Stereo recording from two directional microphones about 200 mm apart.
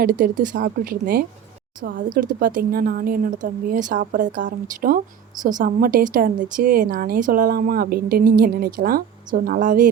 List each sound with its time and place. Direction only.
0.0 s a woman's voice: 45° right (ahead or behind)